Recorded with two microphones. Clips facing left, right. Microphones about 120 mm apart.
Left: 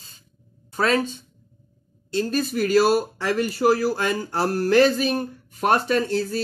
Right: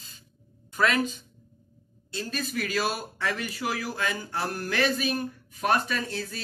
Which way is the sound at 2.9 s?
30° left (ahead or behind).